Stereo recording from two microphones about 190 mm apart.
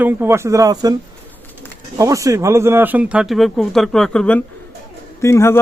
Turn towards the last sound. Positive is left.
turn(degrees=15)  # may be behind; listen again after turning